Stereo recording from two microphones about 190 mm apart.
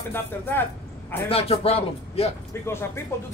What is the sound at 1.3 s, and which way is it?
A man's voice, 30° left (ahead or behind).